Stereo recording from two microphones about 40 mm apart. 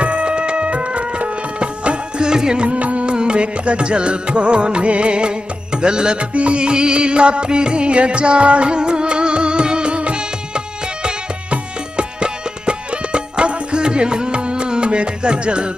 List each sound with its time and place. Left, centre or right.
0.0 s music: right